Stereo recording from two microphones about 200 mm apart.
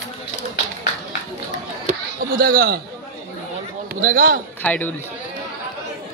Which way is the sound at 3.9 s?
45° right (ahead or behind).